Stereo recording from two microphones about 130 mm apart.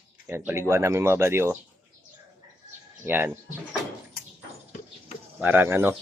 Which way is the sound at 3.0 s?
15° right (ahead or behind).